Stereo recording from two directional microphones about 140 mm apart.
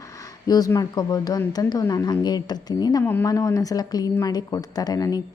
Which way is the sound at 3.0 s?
15° left (ahead or behind).